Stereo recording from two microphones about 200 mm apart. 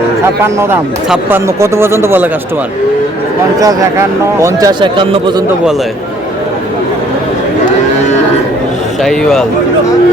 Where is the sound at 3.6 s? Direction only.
15° right (ahead or behind).